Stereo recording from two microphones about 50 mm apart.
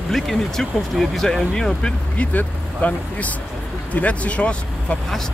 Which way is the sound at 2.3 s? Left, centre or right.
Left.